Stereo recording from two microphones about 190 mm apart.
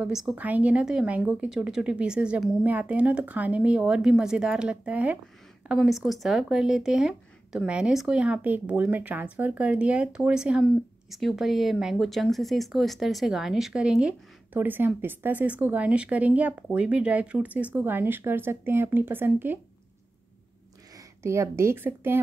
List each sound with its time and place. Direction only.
0.0 s speech: centre (ahead or behind)
20.9 s speech: 15° right (ahead or behind)